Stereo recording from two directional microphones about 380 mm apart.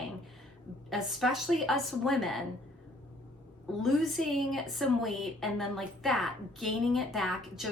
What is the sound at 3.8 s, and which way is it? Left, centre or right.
A woman's voice, centre.